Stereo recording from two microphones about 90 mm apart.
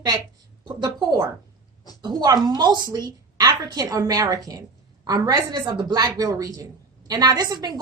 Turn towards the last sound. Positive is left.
turn(degrees=-50)  # may be behind; listen again after turning